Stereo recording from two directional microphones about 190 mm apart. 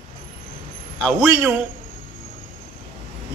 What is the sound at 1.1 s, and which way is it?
Speech, 10° right (ahead or behind).